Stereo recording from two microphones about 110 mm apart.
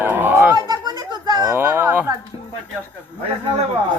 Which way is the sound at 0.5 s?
40° right (ahead or behind).